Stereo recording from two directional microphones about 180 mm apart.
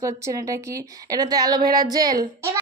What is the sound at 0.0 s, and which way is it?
A woman's voice, 20° right (ahead or behind).